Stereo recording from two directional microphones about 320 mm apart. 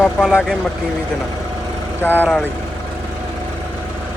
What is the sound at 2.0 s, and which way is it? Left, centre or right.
Speech, centre.